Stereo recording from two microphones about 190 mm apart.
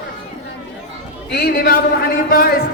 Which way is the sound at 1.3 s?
50° left (ahead or behind).